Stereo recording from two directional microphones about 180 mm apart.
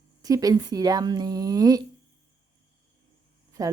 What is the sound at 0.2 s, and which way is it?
A woman's voice, 20° right (ahead or behind).